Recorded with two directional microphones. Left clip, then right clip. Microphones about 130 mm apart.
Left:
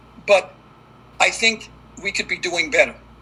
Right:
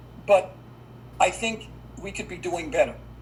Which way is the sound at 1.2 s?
15° left (ahead or behind).